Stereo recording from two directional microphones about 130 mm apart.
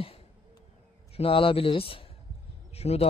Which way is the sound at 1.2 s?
45° left (ahead or behind).